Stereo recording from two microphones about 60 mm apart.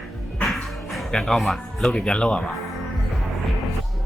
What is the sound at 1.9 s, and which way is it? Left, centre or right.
Speech, centre.